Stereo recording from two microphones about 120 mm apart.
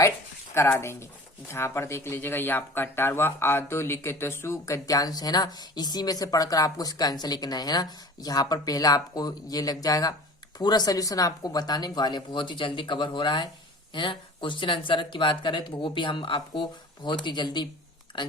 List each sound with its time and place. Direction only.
0.5 s speech: 20° left (ahead or behind); by 18.3 s 40° left (ahead or behind)